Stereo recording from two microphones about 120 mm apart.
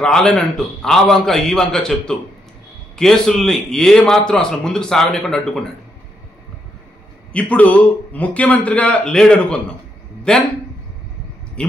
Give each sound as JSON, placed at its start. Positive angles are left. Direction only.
{"t": 0.0, "sound": "a man's voice", "side_deg": 5}
{"t": 7.3, "sound": "a man's voice", "side_deg": 10}